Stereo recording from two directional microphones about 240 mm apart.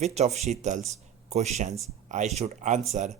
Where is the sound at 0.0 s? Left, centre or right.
Right.